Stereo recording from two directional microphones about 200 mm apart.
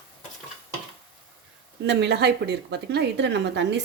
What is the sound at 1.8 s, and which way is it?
Speech, 60° right (ahead or behind).